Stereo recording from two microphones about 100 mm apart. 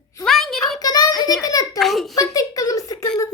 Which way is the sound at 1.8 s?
Centre (ahead or behind).